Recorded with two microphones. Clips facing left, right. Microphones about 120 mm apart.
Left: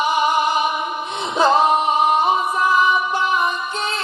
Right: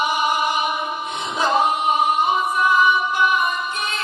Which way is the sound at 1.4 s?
30° left (ahead or behind).